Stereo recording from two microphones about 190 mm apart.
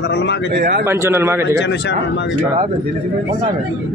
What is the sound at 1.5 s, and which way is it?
Speech, 65° left (ahead or behind).